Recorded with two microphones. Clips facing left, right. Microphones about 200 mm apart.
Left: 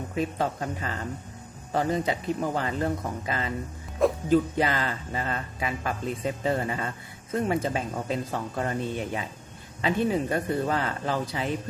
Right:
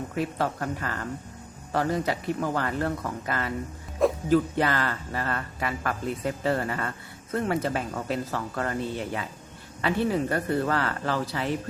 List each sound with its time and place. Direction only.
0.1 s a man's voice: 20° left (ahead or behind)